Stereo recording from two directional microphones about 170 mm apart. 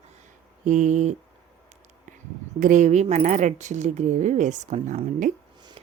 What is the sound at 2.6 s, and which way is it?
A woman's voice, 45° right (ahead or behind).